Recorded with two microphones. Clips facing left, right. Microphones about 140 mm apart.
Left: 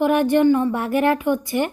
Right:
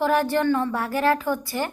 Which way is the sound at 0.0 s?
20° left (ahead or behind).